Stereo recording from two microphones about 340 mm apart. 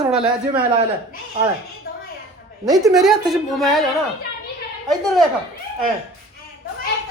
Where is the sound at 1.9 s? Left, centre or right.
Left.